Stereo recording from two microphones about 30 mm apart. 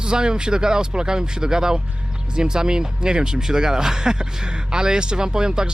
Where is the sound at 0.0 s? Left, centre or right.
Right.